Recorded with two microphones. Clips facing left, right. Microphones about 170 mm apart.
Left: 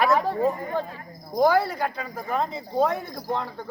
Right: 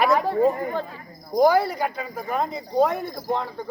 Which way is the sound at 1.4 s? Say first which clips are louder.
Right 2 dB; 15° right (ahead or behind).